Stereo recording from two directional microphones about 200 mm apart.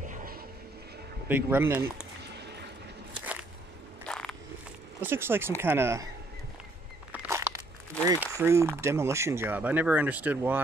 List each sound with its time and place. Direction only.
0.1 s music: 45° right (ahead or behind)
1.3 s speech: 10° right (ahead or behind)
2.3 s a sound: 55° right (ahead or behind)
4.0 s a sound: 5° left (ahead or behind)
5.0 s speech: 10° right (ahead or behind)
7.1 s speech: 10° right (ahead or behind)